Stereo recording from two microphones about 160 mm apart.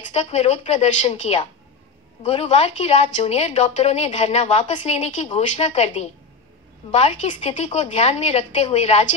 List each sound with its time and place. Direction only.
0.1 s a woman's voice: 45° left (ahead or behind)